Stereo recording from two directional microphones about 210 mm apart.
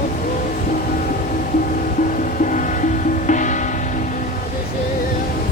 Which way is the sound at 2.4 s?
40° left (ahead or behind).